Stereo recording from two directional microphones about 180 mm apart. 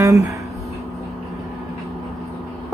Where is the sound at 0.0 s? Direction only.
15° right (ahead or behind).